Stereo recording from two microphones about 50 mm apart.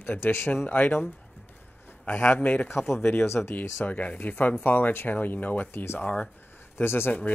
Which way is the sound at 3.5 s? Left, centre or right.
Left.